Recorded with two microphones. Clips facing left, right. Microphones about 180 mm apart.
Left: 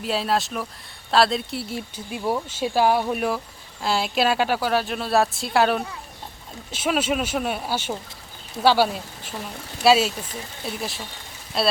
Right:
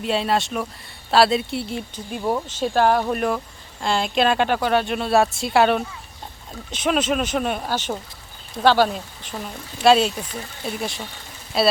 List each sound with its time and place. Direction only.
0.0 s speech: centre (ahead or behind)